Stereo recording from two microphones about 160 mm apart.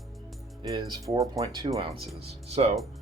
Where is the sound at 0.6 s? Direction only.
30° right (ahead or behind).